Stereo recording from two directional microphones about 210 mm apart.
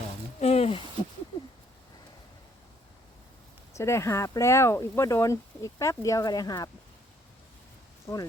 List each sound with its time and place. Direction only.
0.3 s a sound: 30° left (ahead or behind)
3.8 s speech: 15° left (ahead or behind)
8.0 s speech: 15° left (ahead or behind)